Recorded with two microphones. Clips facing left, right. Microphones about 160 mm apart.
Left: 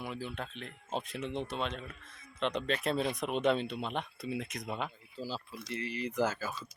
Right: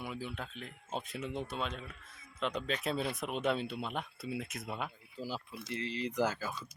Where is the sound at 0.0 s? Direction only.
Centre (ahead or behind).